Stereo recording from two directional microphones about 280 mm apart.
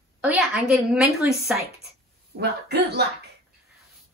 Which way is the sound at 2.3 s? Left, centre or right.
Right.